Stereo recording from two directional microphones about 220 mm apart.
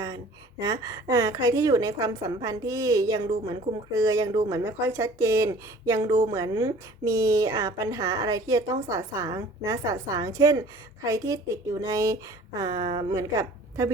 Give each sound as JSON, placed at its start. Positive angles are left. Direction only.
{"t": 0.6, "sound": "a woman's voice", "side_deg": -15}